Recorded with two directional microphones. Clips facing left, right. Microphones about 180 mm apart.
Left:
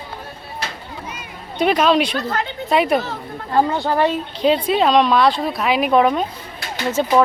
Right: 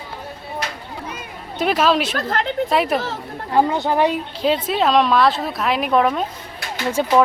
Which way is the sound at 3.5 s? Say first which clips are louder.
Even; 15° right (ahead or behind).